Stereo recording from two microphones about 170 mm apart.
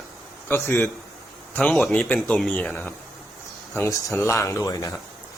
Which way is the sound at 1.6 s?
5° left (ahead or behind).